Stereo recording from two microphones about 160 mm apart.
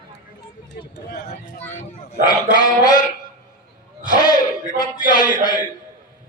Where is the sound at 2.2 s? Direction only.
25° left (ahead or behind).